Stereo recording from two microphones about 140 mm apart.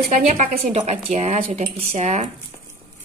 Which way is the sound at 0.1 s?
60° right (ahead or behind).